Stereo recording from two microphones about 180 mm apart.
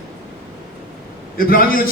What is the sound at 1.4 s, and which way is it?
Speech, 55° left (ahead or behind).